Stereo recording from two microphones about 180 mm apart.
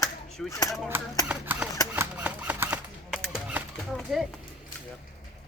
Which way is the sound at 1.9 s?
10° right (ahead or behind).